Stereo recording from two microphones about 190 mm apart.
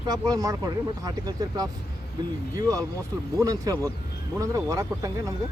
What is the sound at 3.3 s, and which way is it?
Speech, 15° right (ahead or behind).